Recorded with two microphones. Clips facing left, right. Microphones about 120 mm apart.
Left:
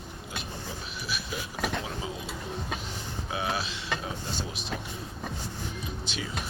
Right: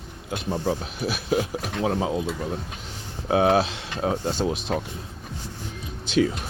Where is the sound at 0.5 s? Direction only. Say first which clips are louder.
Right 12 dB; 60° right (ahead or behind).